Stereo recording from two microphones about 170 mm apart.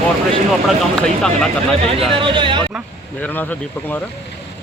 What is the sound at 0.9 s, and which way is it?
Speech, 5° left (ahead or behind).